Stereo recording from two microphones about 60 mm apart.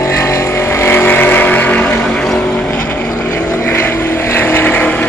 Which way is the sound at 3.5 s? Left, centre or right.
Left.